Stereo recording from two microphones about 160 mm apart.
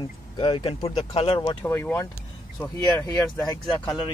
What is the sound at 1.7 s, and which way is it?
Speech, 15° left (ahead or behind).